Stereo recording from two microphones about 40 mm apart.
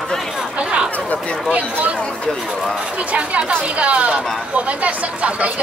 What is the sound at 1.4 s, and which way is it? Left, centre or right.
Speech, right.